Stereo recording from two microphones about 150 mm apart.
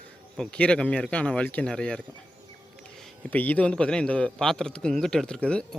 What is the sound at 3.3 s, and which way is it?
A man's voice, 10° left (ahead or behind).